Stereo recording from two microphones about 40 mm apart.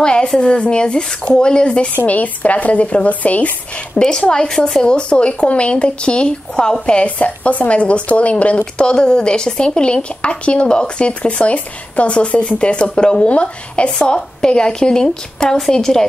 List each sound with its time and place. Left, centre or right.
0.0 s a sound: left
0.4 s speech: left
2.0 s speech: left
3.9 s speech: left
7.1 s speech: left
8.7 s a woman's voice: left